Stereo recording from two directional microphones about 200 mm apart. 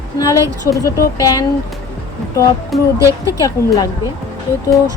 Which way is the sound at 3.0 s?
15° right (ahead or behind).